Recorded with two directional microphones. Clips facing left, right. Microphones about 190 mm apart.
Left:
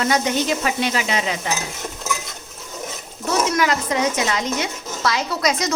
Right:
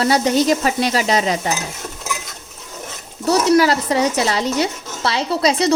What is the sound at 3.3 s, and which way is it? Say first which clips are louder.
Speech: right 6 dB; 35° right (ahead or behind).